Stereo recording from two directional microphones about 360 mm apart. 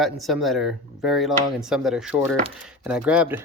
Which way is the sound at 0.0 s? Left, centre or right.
Centre.